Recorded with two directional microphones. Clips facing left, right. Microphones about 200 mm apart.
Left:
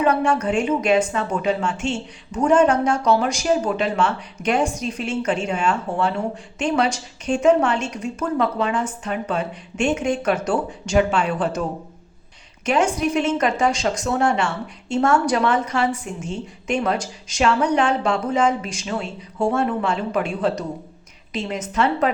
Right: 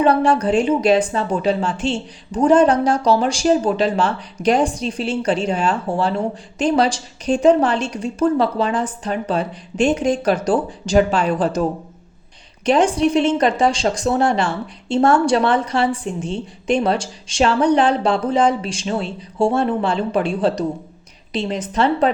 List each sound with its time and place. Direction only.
0.0 s a woman's voice: 35° right (ahead or behind)
12.6 s a woman's voice: 35° right (ahead or behind)